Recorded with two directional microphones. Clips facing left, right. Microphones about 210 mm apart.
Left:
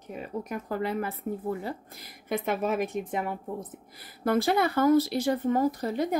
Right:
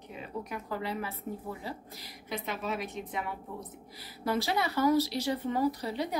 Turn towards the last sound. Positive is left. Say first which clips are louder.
# left 5 dB
turn(degrees=50)  # may be behind; listen again after turning